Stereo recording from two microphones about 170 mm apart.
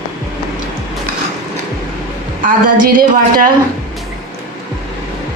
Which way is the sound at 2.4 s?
55° right (ahead or behind).